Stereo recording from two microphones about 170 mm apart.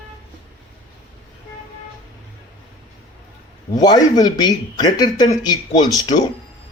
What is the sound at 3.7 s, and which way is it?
Speech, 25° left (ahead or behind).